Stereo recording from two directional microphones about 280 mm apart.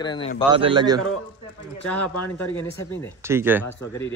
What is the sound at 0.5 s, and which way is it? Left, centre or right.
Speech, centre.